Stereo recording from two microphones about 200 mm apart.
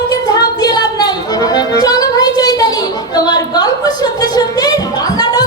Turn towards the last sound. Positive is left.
turn(degrees=20)  # may be behind; listen again after turning